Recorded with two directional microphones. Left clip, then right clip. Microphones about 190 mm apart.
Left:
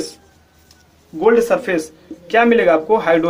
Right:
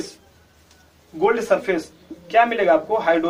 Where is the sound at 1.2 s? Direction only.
60° left (ahead or behind).